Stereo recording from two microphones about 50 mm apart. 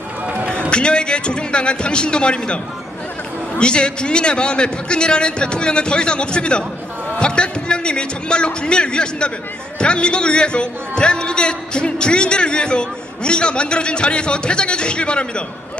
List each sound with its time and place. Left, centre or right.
0.7 s a man's voice: centre
3.6 s a man's voice: centre